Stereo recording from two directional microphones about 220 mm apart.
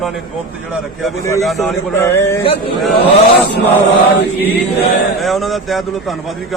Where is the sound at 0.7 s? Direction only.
Centre (ahead or behind).